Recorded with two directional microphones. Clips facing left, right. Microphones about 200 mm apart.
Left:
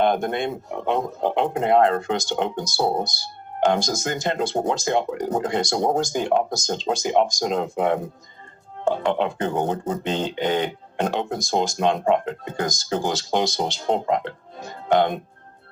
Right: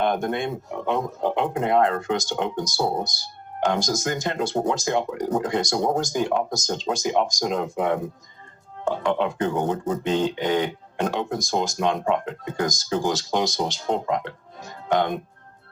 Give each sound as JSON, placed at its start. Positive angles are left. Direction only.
{"t": 0.0, "sound": "speech", "side_deg": 30}
{"t": 14.5, "sound": "music", "side_deg": 30}